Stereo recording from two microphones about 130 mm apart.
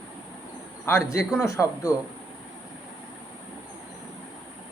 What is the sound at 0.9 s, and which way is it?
A man's voice, 20° left (ahead or behind).